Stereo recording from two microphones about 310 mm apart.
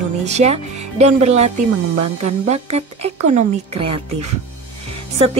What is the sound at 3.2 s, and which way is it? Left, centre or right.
Speech, right.